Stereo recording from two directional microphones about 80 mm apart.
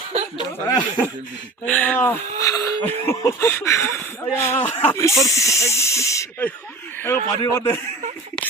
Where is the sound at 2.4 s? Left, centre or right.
Left.